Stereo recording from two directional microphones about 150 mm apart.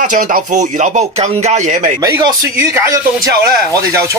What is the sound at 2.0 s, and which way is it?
Speech, 25° right (ahead or behind).